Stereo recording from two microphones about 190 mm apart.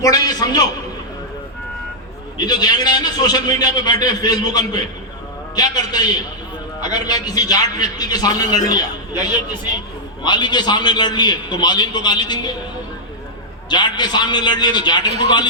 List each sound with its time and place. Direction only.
0.0 s a man's voice: 20° left (ahead or behind)
2.4 s a man's voice: 20° left (ahead or behind)
13.7 s a man's voice: 25° left (ahead or behind)